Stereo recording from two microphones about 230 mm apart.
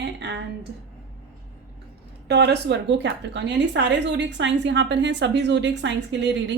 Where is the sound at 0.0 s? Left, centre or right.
Right.